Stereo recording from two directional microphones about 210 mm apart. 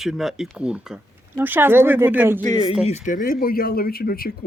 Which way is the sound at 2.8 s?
35° left (ahead or behind).